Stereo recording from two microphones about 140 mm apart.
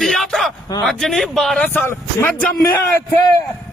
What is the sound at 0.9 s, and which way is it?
Speech, centre (ahead or behind).